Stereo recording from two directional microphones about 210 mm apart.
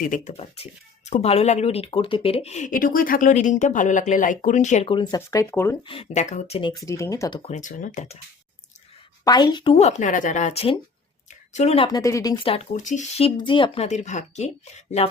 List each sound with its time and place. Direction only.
0.0 s speech: 35° left (ahead or behind); by 5.7 s 10° left (ahead or behind)
5.9 s speech: 30° left (ahead or behind)
7.4 s speech: 35° left (ahead or behind)
9.2 s speech: 20° left (ahead or behind)
11.3 s a sound: 35° left (ahead or behind)
11.9 s speech: 15° left (ahead or behind)